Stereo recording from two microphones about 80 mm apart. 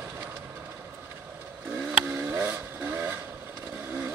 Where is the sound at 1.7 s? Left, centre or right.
Right.